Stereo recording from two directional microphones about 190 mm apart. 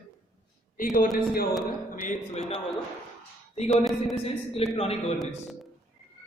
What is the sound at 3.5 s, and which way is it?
A man's voice, 35° left (ahead or behind).